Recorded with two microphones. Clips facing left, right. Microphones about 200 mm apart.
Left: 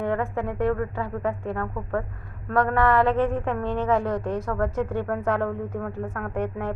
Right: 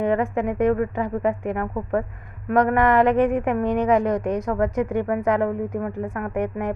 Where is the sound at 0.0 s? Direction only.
15° right (ahead or behind).